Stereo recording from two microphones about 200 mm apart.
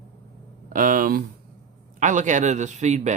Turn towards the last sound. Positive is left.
turn(degrees=-35)  # may be behind; listen again after turning